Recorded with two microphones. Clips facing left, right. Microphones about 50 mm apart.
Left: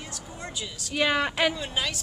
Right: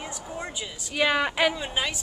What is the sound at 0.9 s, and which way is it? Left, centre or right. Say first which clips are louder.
Speech: right 1 dB; centre.